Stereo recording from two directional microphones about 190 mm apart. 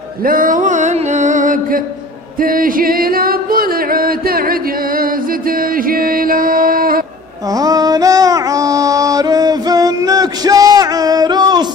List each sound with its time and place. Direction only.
0.2 s music: 45° right (ahead or behind)
5.9 s music: 50° right (ahead or behind)
7.5 s music: 20° right (ahead or behind)